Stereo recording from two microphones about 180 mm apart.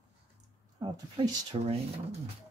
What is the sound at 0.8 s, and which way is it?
Speech, 30° right (ahead or behind).